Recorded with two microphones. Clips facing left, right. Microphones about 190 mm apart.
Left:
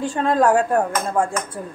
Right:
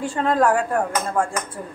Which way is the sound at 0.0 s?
15° left (ahead or behind).